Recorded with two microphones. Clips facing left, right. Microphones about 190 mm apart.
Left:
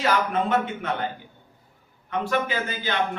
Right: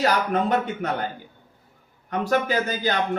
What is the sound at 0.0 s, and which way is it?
Speech, 40° right (ahead or behind).